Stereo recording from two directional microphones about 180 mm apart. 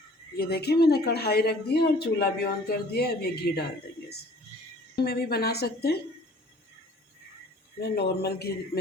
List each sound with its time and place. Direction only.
0.3 s speech: 60° left (ahead or behind)
5.0 s speech: 60° left (ahead or behind)
7.8 s speech: 65° left (ahead or behind)